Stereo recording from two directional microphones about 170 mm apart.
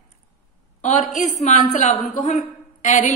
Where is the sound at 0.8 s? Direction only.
45° left (ahead or behind).